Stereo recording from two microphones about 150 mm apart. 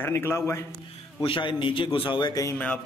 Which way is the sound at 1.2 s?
35° left (ahead or behind).